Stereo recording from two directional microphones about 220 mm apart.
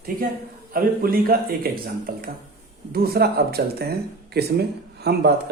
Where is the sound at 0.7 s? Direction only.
40° right (ahead or behind).